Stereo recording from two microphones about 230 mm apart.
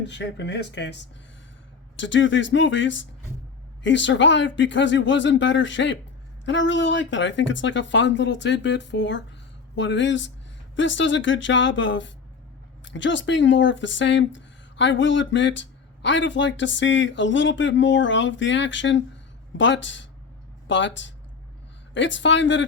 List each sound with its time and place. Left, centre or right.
0.1 s speech: left